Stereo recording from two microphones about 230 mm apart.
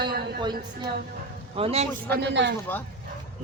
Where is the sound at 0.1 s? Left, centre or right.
Right.